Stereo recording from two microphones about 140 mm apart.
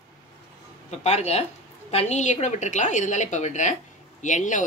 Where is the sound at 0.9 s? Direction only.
50° left (ahead or behind).